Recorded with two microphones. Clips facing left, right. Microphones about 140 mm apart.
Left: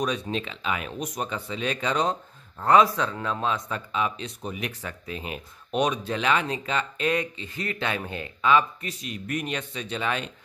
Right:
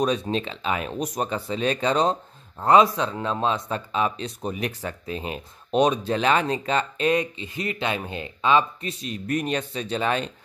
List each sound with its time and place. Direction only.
0.0 s speech: 35° right (ahead or behind)
2.6 s speech: 20° right (ahead or behind)
7.1 s speech: 20° right (ahead or behind); by 10.3 s 35° right (ahead or behind)